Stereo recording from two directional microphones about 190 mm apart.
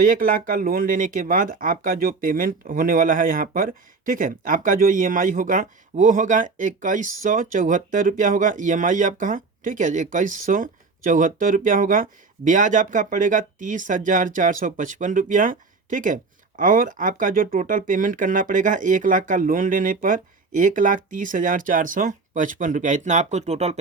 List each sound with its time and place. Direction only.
0.0 s speech: 45° right (ahead or behind)